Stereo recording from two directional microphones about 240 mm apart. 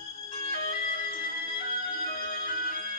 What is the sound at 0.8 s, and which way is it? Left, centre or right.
Music, left.